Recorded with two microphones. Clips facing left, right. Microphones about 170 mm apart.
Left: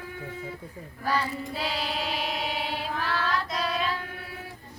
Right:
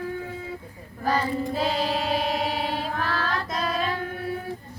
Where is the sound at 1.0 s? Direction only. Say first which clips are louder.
Right 4 dB; 45° right (ahead or behind).